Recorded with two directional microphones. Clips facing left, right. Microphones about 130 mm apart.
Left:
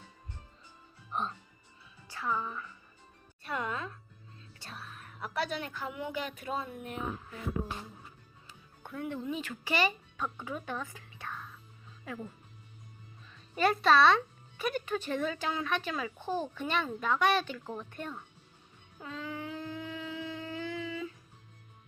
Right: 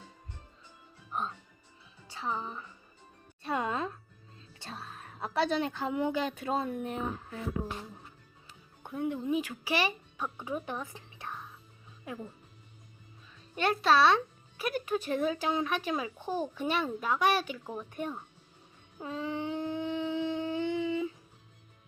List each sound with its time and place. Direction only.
1.1 s speech: centre (ahead or behind)
2.0 s a woman's voice: 20° right (ahead or behind)
3.4 s music: 25° right (ahead or behind)
4.6 s a woman's voice: 30° right (ahead or behind)
8.8 s speech: 15° right (ahead or behind)
10.9 s whispering: 20° right (ahead or behind)
13.6 s a child's voice: centre (ahead or behind)
18.9 s a sound: 25° right (ahead or behind)